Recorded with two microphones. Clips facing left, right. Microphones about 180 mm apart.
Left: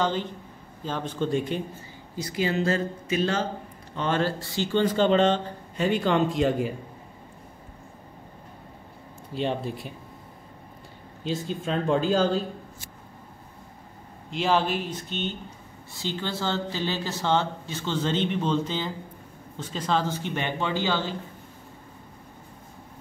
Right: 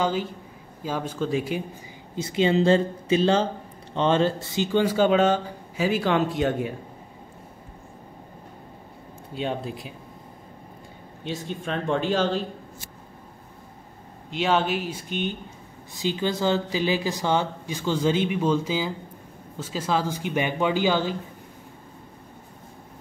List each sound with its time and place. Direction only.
0.0 s speech: 10° right (ahead or behind)
2.1 s speech: 25° right (ahead or behind); by 6.8 s centre (ahead or behind)
9.3 s speech: centre (ahead or behind)
12.1 s speech: centre (ahead or behind)
14.3 s speech: centre (ahead or behind)